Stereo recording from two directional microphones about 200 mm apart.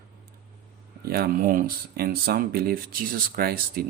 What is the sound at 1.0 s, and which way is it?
Speech, 50° right (ahead or behind).